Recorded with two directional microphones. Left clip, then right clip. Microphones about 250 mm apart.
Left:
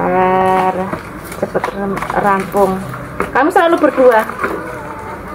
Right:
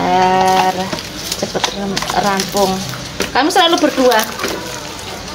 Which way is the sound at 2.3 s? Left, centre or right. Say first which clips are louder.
Left 2 dB; right.